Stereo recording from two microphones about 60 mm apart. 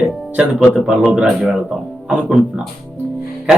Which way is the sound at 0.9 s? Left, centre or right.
Centre.